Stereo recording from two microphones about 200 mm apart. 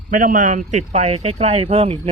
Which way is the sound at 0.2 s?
40° right (ahead or behind).